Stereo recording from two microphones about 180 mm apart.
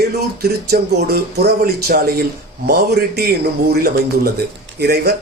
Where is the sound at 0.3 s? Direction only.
60° right (ahead or behind).